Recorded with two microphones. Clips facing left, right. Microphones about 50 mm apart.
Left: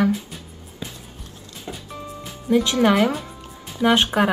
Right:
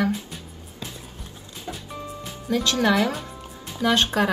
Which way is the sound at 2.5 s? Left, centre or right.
Centre.